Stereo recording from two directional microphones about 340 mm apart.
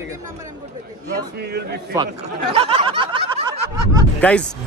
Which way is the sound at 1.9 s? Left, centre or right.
Centre.